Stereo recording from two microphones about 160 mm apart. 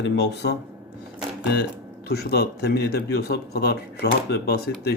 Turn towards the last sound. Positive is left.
turn(degrees=85)